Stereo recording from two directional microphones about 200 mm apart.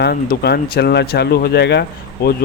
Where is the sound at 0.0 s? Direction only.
50° left (ahead or behind).